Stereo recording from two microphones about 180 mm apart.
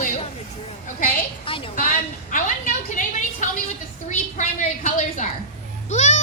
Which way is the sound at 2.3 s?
45° left (ahead or behind).